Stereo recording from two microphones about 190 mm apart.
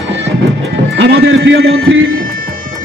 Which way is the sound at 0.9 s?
65° right (ahead or behind).